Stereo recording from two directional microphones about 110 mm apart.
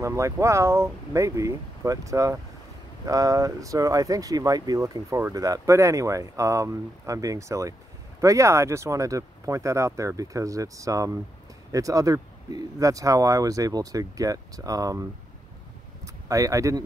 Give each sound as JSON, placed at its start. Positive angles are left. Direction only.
{"t": 0.0, "sound": "speech", "side_deg": -30}
{"t": 16.3, "sound": "speech", "side_deg": -30}